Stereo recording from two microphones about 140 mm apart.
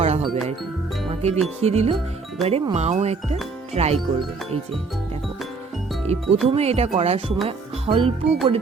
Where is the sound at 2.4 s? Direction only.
Centre (ahead or behind).